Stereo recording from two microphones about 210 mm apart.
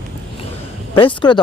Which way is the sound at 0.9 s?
25° left (ahead or behind).